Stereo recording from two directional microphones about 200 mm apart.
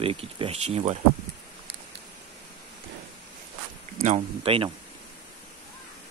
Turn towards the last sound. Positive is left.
turn(degrees=-30)  # may be behind; listen again after turning